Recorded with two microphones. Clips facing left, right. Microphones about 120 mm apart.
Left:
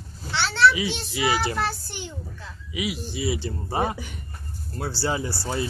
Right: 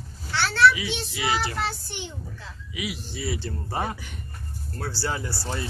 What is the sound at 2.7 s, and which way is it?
Speech, 15° left (ahead or behind).